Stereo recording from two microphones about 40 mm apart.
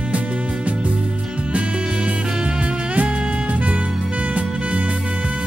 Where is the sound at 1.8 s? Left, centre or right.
Right.